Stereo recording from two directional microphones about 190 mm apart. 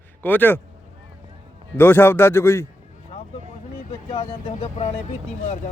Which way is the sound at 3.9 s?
30° left (ahead or behind).